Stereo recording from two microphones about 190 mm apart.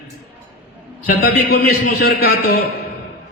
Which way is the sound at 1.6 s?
50° left (ahead or behind).